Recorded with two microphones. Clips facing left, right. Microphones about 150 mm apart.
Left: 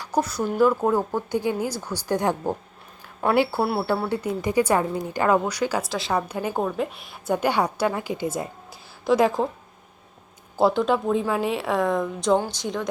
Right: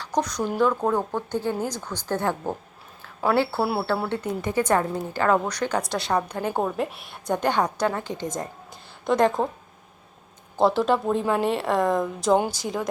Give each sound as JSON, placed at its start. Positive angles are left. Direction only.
{"t": 0.0, "sound": "speech", "side_deg": 10}
{"t": 3.6, "sound": "a woman's voice", "side_deg": 0}
{"t": 4.1, "sound": "speech", "side_deg": 10}
{"t": 6.6, "sound": "a woman's voice", "side_deg": -5}
{"t": 10.6, "sound": "a woman's voice", "side_deg": 0}